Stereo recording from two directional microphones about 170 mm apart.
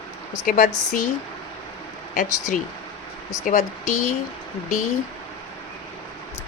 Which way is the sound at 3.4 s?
45° left (ahead or behind).